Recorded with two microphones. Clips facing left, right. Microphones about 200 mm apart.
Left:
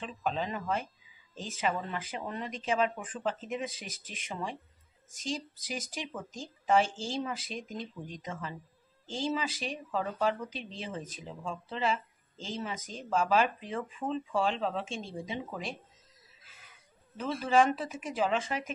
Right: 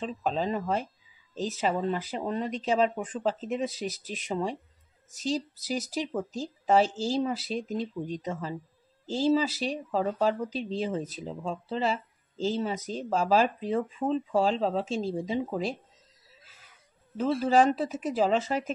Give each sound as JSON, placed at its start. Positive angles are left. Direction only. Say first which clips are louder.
{"t": 0.0, "sound": "speech", "louder": "right 5 dB", "side_deg": -35}
{"t": 17.2, "sound": "speech", "louder": "right 4 dB", "side_deg": -35}